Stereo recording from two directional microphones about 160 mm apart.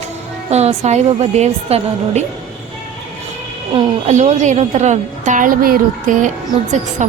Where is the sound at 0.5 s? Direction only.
40° right (ahead or behind).